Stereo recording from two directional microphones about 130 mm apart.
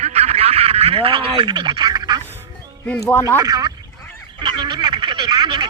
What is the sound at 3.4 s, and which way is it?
Speech, 30° right (ahead or behind).